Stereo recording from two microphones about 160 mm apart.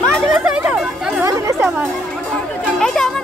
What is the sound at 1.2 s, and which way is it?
Chatter, 20° right (ahead or behind).